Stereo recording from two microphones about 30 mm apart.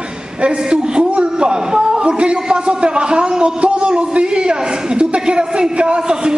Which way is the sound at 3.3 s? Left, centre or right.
Right.